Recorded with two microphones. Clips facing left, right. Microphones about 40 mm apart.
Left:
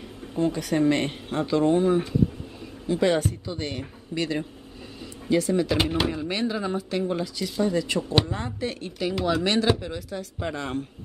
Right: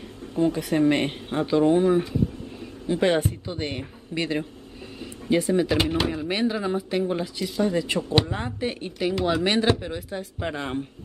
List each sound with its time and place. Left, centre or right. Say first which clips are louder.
0.4 s speech: right 2 dB; centre
2.9 s a man's voice: right 1 dB; right
5.8 s a man's voice: right 1 dB; centre